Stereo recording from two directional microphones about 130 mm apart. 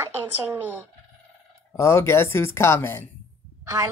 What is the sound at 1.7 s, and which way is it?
Speech, 20° left (ahead or behind).